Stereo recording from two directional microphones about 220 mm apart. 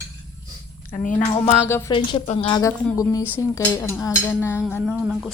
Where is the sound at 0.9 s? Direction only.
35° left (ahead or behind).